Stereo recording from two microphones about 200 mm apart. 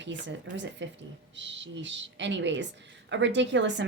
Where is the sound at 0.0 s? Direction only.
65° right (ahead or behind).